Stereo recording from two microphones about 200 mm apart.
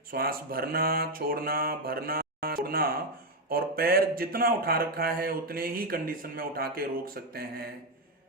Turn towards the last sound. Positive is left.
turn(degrees=-50)  # may be behind; listen again after turning